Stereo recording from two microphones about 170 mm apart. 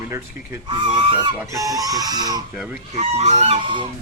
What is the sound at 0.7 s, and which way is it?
Speech, 30° right (ahead or behind).